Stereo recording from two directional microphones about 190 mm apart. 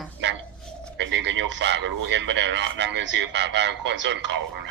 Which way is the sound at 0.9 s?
70° right (ahead or behind).